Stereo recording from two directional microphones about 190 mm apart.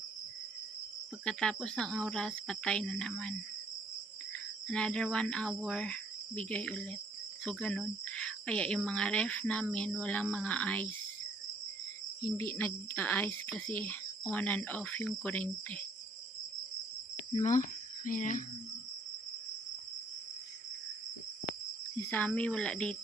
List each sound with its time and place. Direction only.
1.2 s speech: 5° left (ahead or behind)
12.4 s speech: 10° left (ahead or behind)
17.4 s speech: 40° left (ahead or behind)
22.4 s speech: 5° left (ahead or behind)